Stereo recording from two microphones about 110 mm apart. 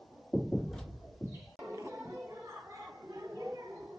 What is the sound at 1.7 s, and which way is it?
Music, 25° right (ahead or behind).